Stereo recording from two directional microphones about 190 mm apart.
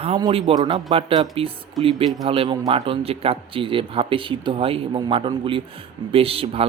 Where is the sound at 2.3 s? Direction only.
25° right (ahead or behind).